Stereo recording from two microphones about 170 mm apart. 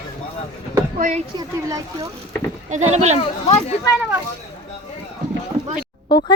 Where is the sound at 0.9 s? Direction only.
45° right (ahead or behind).